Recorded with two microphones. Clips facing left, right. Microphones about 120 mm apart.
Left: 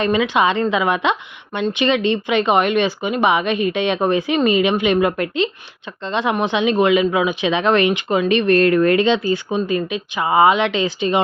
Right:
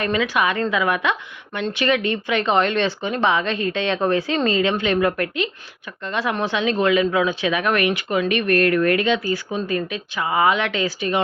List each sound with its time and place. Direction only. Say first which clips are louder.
0.0 s speech: left 4 dB; 20° left (ahead or behind)